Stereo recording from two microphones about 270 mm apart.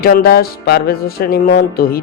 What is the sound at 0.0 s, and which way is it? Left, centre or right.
Speech, left.